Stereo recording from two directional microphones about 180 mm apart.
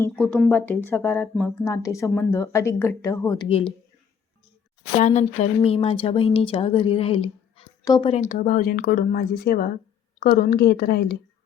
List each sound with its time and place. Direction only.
0.0 s speech: 5° left (ahead or behind)
4.9 s a woman's voice: 40° left (ahead or behind); by 11.2 s 60° left (ahead or behind)